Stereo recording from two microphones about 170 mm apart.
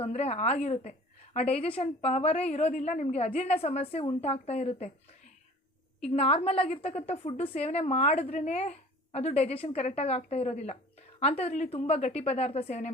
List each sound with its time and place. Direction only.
0.0 s a woman's voice: 40° left (ahead or behind)
6.1 s a woman's voice: 35° left (ahead or behind)